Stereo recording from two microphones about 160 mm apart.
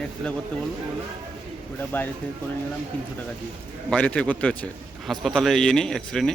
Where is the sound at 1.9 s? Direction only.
15° left (ahead or behind).